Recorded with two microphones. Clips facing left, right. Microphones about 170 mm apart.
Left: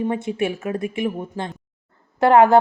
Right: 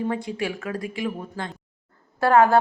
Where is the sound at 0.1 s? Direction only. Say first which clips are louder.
Left 4 dB; 25° left (ahead or behind).